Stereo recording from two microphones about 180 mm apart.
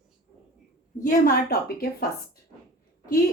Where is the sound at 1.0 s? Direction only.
55° left (ahead or behind).